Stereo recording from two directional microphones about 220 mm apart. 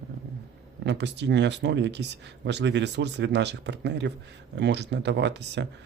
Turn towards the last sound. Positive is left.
turn(degrees=-50)  # may be behind; listen again after turning